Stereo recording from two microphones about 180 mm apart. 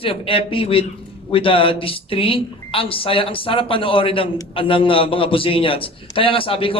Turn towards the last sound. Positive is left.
turn(degrees=30)  # may be behind; listen again after turning